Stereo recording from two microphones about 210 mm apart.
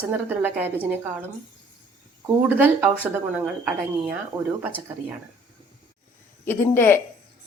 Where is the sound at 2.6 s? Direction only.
10° right (ahead or behind).